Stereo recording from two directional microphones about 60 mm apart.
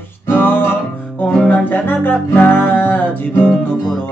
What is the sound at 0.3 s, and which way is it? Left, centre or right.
Music, left.